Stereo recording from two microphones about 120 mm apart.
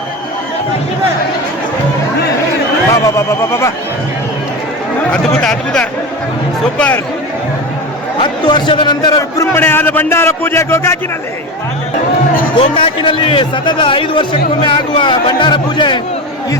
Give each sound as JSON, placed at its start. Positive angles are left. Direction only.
{"t": 3.2, "sound": "speech", "side_deg": 25}
{"t": 5.1, "sound": "speech", "side_deg": 5}
{"t": 8.2, "sound": "a man's voice", "side_deg": 40}
{"t": 9.5, "sound": "speech", "side_deg": 20}
{"t": 12.5, "sound": "a man's voice", "side_deg": 45}